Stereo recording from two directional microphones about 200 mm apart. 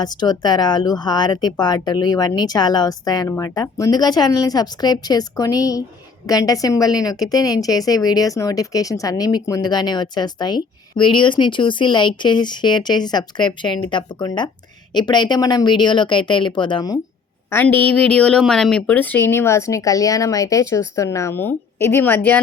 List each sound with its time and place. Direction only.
0.0 s a woman's voice: 20° left (ahead or behind)
17.5 s speech: 10° left (ahead or behind)